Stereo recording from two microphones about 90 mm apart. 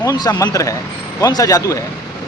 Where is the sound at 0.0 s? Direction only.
40° left (ahead or behind).